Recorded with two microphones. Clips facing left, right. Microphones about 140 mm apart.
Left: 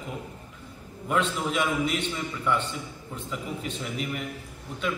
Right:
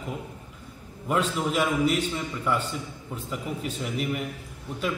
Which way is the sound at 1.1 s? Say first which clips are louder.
Right 1 dB; 5° right (ahead or behind).